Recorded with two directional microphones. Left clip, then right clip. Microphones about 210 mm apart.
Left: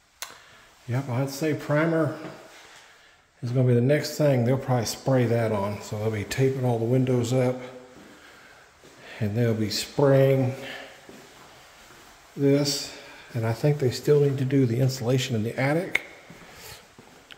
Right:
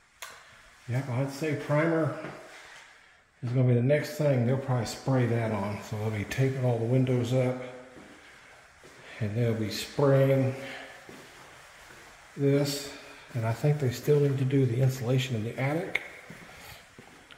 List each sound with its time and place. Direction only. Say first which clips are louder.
0.2 s a sound: left 4 dB; 30° left (ahead or behind)
1.1 s speech: left 4 dB; 35° left (ahead or behind)
3.5 s speech: left 4 dB; 35° left (ahead or behind)
9.1 s speech: left 4 dB; 35° left (ahead or behind)
12.4 s speech: left 4 dB; 30° left (ahead or behind)